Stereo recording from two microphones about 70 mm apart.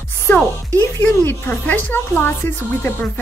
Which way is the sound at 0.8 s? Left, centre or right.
Left.